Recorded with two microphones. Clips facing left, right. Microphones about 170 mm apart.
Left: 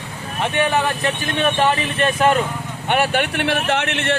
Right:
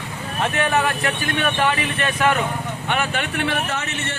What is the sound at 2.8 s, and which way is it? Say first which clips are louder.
Speech: left 6 dB; 60° left (ahead or behind).